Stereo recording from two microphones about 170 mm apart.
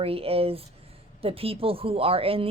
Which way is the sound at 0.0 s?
35° right (ahead or behind).